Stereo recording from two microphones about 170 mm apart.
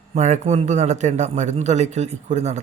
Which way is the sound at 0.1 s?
40° right (ahead or behind).